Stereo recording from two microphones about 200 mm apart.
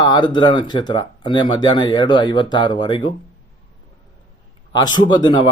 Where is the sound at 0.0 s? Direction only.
20° left (ahead or behind).